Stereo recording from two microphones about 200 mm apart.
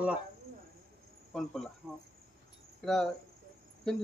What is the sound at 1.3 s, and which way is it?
Speech, centre (ahead or behind).